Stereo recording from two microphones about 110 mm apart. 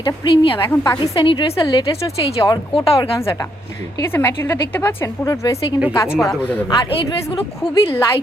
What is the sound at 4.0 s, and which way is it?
A woman's voice, 20° left (ahead or behind).